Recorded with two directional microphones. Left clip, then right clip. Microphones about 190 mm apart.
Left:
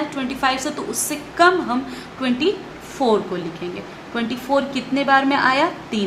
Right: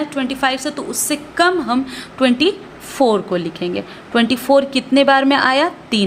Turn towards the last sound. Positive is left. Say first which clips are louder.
# right 3 dB
turn(degrees=-50)  # may be behind; listen again after turning